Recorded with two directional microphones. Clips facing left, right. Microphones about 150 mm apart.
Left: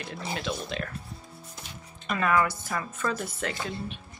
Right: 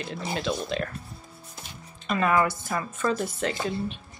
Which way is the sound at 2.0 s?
30° right (ahead or behind).